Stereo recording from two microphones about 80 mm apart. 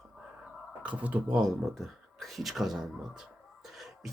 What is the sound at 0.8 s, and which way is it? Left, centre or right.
Speech, centre.